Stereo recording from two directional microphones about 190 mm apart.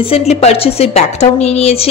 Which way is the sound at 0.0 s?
30° left (ahead or behind).